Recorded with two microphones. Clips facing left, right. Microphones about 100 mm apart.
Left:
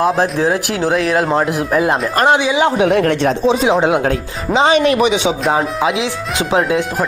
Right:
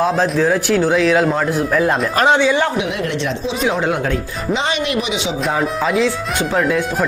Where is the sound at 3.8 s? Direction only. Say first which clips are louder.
Left 5 dB; 20° left (ahead or behind).